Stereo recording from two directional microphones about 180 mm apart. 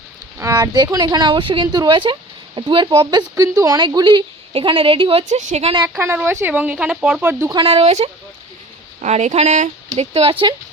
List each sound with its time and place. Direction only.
0.3 s speech: 15° right (ahead or behind); by 5.7 s 40° right (ahead or behind)
6.0 s speech: 10° right (ahead or behind)
7.5 s speech: 30° right (ahead or behind)